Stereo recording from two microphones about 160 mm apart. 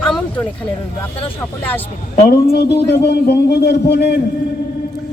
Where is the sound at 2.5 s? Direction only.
90° left.